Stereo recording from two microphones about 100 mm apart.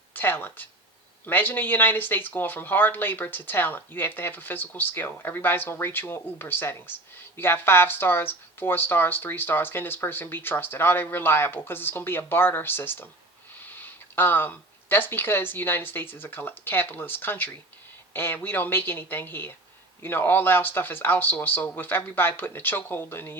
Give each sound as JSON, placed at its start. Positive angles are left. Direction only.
{"t": 0.1, "sound": "speech", "side_deg": 20}